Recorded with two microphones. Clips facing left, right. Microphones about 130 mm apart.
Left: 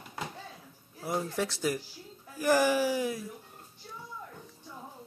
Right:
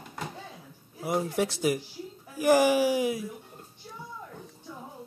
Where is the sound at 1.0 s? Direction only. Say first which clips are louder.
Right 4 dB; 15° right (ahead or behind).